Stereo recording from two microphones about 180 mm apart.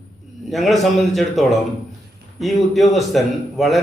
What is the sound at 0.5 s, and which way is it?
A man's voice, centre (ahead or behind).